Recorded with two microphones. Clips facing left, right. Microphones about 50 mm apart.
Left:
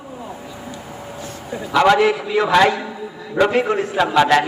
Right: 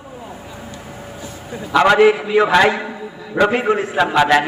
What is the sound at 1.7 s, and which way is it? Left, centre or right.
A man's voice, centre.